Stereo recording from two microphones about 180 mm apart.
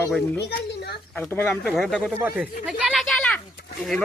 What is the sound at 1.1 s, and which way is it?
Speech, 10° left (ahead or behind).